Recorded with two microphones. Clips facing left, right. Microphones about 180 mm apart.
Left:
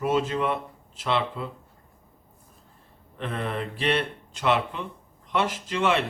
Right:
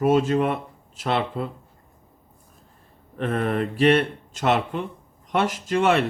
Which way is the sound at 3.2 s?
50° right (ahead or behind).